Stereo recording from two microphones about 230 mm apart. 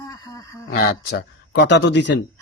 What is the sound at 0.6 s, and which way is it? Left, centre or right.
A man's voice, left.